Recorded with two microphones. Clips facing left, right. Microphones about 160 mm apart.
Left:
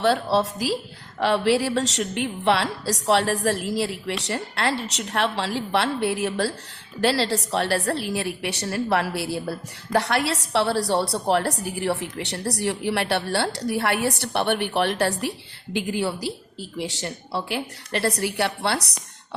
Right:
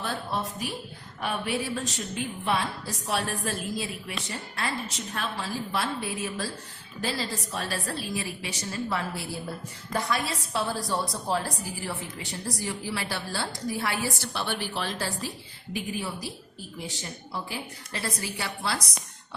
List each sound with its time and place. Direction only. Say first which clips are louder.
0.0 s a woman's voice: left 11 dB; 85° left; by 15.3 s 70° left (ahead or behind)
15.7 s a woman's voice: left 7 dB; 80° left